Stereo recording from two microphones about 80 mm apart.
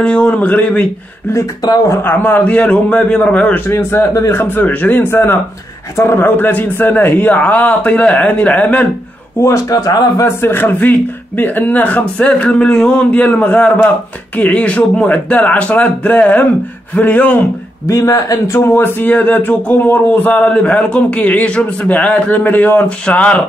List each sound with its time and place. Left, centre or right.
0.0 s speech: centre
1.3 s speech: left
2.0 s a man's voice: left
3.5 s a man's voice: left
9.4 s speech: left
10.2 s a man's voice: left
17.8 s speech: left
18.8 s a man's voice: left